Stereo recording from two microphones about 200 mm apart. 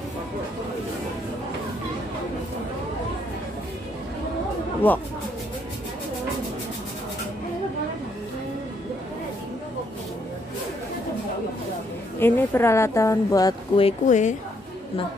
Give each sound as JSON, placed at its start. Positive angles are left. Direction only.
{"t": 12.2, "sound": "speech", "side_deg": 10}
{"t": 14.0, "sound": "a woman's voice", "side_deg": 35}